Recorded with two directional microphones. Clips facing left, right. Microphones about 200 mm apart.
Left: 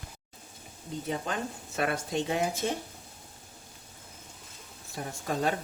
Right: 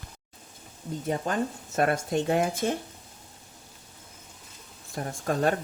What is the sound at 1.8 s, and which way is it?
Speech, 50° right (ahead or behind).